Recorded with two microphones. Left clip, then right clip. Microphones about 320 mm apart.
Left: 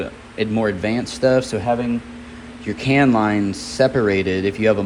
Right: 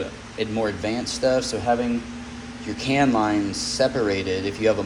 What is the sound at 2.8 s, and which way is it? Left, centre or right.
Speech, left.